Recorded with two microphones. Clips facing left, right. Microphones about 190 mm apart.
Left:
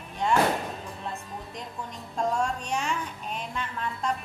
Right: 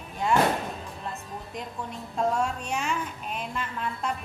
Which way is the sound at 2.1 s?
5° right (ahead or behind).